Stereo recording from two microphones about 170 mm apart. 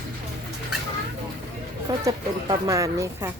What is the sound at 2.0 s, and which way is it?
Speech, 20° right (ahead or behind).